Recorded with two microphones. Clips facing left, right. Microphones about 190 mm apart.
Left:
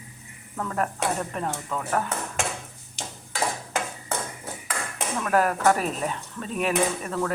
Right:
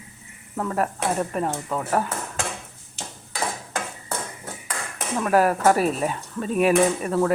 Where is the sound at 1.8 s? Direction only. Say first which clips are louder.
Right 3 dB; 25° right (ahead or behind).